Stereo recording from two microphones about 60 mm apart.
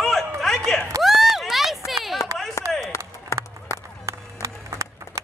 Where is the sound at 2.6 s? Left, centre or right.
Left.